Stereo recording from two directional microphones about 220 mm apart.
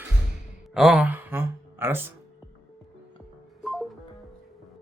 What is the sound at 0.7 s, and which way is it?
Speech, centre (ahead or behind).